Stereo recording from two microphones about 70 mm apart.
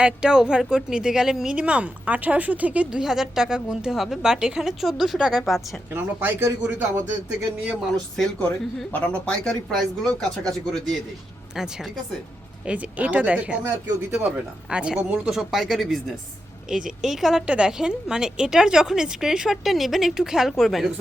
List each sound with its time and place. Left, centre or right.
0.0 s speech: centre
5.9 s speech: right
7.6 s speech: centre
7.9 s speech: centre
11.5 s a woman's voice: centre
12.6 s speech: right; by 20.9 s centre